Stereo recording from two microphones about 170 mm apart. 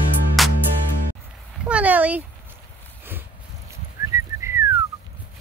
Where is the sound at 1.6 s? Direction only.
10° right (ahead or behind).